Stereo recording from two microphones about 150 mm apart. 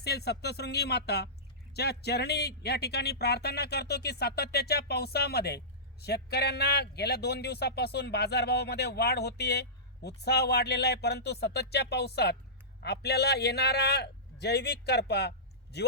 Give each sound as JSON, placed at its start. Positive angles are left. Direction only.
{"t": 0.0, "sound": "a man's voice", "side_deg": 90}